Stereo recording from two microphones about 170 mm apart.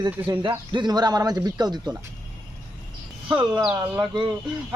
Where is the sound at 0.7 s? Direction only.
25° right (ahead or behind).